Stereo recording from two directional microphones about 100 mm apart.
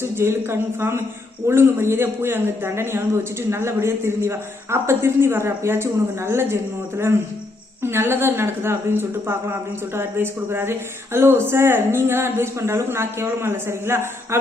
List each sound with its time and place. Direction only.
0.0 s a woman's voice: 25° right (ahead or behind)